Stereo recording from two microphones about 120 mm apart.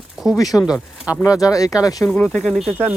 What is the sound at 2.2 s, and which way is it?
Speech, 5° left (ahead or behind).